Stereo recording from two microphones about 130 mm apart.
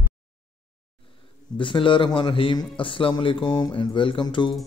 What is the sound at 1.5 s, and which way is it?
A man's voice, 40° left (ahead or behind).